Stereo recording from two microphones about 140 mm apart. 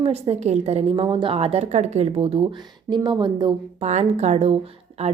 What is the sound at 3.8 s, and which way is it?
A woman's voice, 55° right (ahead or behind).